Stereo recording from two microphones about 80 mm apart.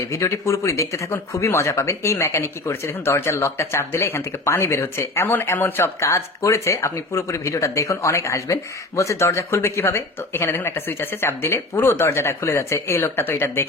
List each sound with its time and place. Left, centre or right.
0.1 s speech: left